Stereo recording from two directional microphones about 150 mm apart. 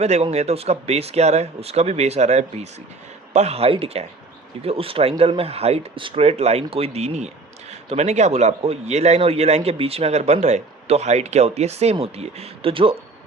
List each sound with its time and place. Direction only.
0.0 s a man's voice: 45° right (ahead or behind)